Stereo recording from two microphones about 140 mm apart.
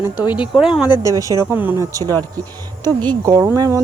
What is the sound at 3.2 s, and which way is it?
Speech, 30° right (ahead or behind).